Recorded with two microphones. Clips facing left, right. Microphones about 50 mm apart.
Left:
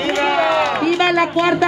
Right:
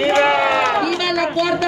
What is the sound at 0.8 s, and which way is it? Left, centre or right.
Speech, left.